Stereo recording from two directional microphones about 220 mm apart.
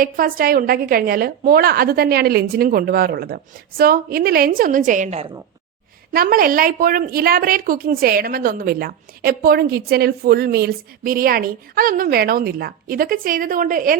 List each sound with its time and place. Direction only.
0.0 s a woman's voice: 40° right (ahead or behind)
6.1 s a woman's voice: 40° right (ahead or behind)